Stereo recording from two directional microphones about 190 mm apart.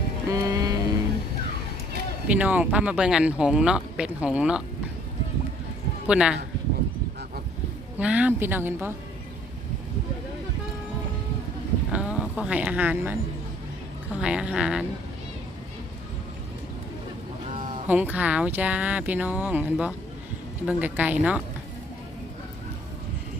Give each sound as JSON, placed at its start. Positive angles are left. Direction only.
{"t": 0.3, "sound": "a sound", "side_deg": -15}
{"t": 2.2, "sound": "speech", "side_deg": -5}
{"t": 6.1, "sound": "speech", "side_deg": -5}
{"t": 7.9, "sound": "speech", "side_deg": -5}
{"t": 11.9, "sound": "speech", "side_deg": -5}
{"t": 14.2, "sound": "speech", "side_deg": -5}
{"t": 17.5, "sound": "a sound", "side_deg": -40}
{"t": 17.8, "sound": "speech", "side_deg": -10}